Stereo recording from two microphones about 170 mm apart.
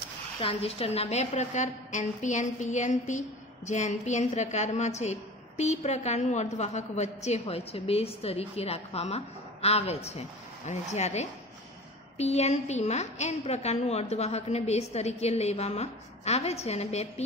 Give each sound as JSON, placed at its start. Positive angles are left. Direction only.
{"t": 0.4, "sound": "a woman's voice", "side_deg": 35}